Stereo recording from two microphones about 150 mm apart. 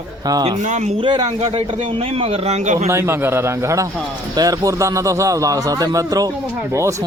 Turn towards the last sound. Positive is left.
turn(degrees=-25)  # may be behind; listen again after turning